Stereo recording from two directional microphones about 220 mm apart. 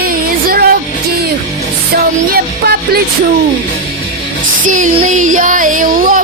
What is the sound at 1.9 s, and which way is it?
Music, 45° right (ahead or behind).